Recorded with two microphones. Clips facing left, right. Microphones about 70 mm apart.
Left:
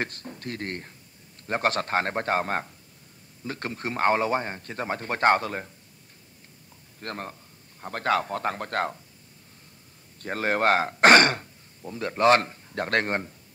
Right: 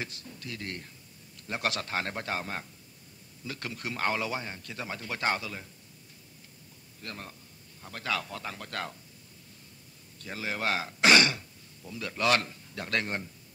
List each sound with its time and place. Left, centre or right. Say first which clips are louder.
0.0 s a man's voice: left 7 dB; left
7.0 s a man's voice: left 8 dB; left
10.1 s speech: left 9 dB; left